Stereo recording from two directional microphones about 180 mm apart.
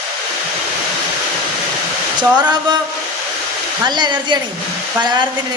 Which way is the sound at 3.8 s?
25° right (ahead or behind).